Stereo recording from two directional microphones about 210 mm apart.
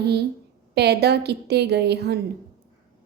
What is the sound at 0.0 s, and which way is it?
A woman's voice, 50° right (ahead or behind).